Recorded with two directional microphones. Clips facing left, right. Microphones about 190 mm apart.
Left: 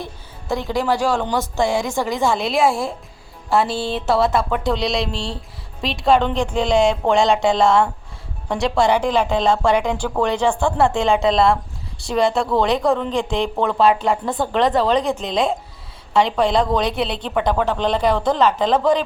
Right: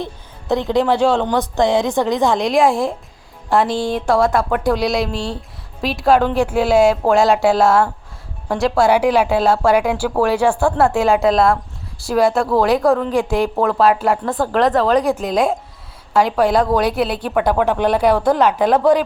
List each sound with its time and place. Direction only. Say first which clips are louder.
0.0 s a woman's voice: right 4 dB; 20° right (ahead or behind)